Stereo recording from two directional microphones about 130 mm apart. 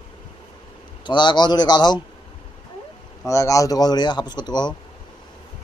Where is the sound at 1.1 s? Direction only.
35° left (ahead or behind).